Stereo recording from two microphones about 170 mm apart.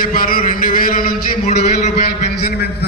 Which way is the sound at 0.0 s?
55° left (ahead or behind).